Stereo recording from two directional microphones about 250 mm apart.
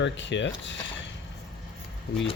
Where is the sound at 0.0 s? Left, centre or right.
Left.